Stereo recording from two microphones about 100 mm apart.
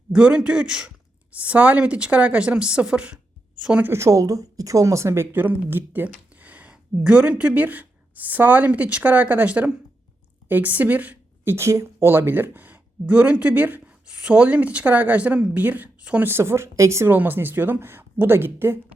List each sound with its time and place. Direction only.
0.1 s speech: 10° right (ahead or behind)
3.8 s a woman's voice: 30° right (ahead or behind)
11.5 s speech: 30° right (ahead or behind)